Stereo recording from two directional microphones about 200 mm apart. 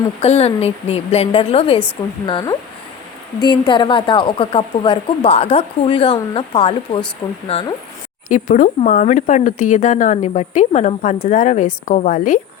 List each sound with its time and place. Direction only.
0.2 s speech: 30° left (ahead or behind)
7.2 s speech: 15° left (ahead or behind)
8.3 s speech: 40° left (ahead or behind)